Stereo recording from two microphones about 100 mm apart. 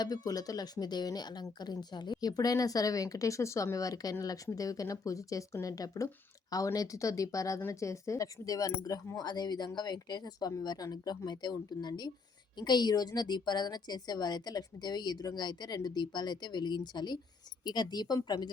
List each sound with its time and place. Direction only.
0.0 s a woman's voice: 40° left (ahead or behind)